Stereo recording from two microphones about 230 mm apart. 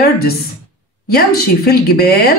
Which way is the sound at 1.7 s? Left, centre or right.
Left.